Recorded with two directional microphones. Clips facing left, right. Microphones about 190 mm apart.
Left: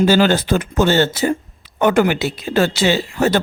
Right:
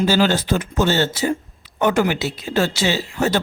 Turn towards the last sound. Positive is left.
turn(degrees=60)  # may be behind; listen again after turning